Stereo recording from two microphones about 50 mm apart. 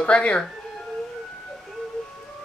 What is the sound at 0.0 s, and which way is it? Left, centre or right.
Speech, left.